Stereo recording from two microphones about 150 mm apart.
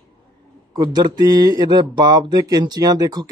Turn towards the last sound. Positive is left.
turn(degrees=-25)  # may be behind; listen again after turning